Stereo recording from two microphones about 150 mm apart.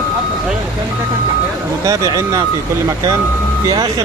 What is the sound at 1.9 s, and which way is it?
Speech, 25° right (ahead or behind).